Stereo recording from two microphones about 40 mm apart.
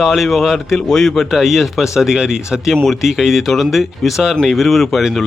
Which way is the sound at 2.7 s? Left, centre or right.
Centre.